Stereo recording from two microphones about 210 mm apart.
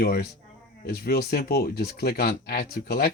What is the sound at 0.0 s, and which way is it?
Speech, 45° left (ahead or behind).